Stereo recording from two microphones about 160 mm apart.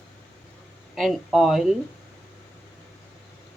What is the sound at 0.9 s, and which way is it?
Speech, centre (ahead or behind).